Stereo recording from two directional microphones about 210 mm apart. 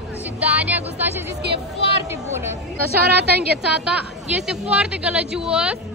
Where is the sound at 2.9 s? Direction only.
50° right (ahead or behind).